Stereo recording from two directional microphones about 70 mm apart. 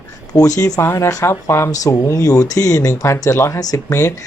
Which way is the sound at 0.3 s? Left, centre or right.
Left.